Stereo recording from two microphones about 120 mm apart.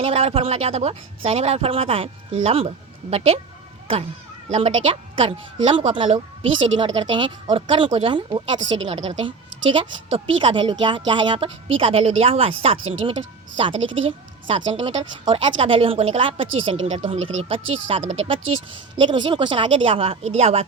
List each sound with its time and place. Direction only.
0.0 s speech: 55° right (ahead or behind)
4.5 s a woman's voice: 50° right (ahead or behind)
11.4 s a woman's voice: 50° right (ahead or behind)
14.4 s a woman's voice: 45° right (ahead or behind)
18.0 s speech: 70° right (ahead or behind)
18.9 s a woman's voice: 40° right (ahead or behind); by 20.7 s 60° right (ahead or behind)